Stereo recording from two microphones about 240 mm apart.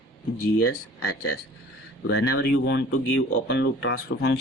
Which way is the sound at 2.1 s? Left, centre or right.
Left.